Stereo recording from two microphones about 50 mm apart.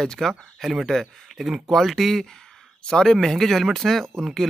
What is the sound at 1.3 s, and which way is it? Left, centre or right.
Speech, centre.